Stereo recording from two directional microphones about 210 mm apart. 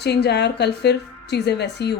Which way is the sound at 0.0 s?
50° left (ahead or behind).